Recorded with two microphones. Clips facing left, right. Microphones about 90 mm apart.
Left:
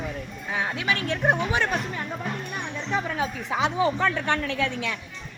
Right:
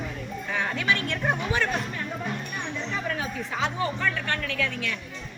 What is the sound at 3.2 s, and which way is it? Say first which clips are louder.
A woman's voice: left 3 dB; 20° left (ahead or behind).